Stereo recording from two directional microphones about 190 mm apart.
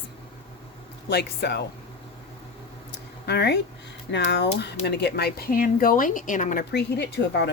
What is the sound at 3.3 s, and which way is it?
Speech, 60° left (ahead or behind).